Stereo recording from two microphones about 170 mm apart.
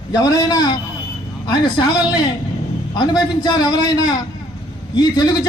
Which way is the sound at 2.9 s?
25° left (ahead or behind).